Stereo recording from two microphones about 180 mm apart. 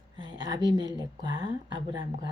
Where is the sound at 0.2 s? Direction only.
20° right (ahead or behind).